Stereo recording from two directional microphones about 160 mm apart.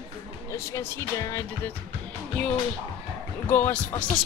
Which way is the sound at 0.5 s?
15° left (ahead or behind).